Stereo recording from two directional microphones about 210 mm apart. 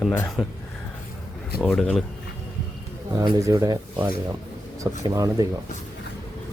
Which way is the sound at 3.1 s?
20° right (ahead or behind).